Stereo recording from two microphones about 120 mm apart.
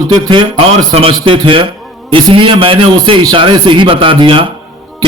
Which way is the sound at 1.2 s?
45° right (ahead or behind).